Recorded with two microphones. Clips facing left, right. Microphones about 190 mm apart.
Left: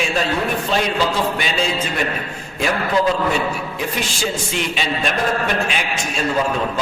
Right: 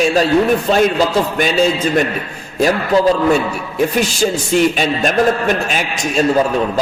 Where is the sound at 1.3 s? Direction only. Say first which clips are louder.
Right 7 dB; 45° right (ahead or behind).